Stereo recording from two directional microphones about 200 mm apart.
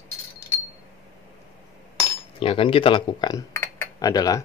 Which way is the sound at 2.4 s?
30° left (ahead or behind).